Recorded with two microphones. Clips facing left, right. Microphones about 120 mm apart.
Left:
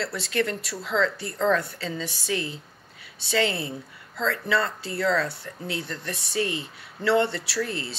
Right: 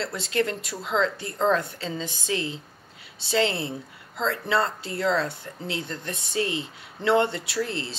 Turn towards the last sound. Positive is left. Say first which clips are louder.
# even
turn(degrees=-25)  # may be behind; listen again after turning